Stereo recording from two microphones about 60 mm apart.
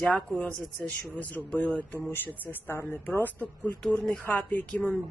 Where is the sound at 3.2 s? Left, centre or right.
Left.